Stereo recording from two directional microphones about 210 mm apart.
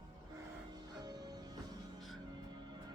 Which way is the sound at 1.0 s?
20° right (ahead or behind).